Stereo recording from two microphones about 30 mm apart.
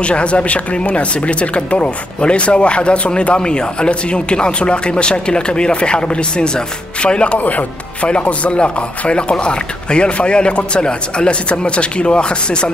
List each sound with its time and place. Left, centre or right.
0.0 s speech: left
7.3 s speech: left
8.1 s speech: left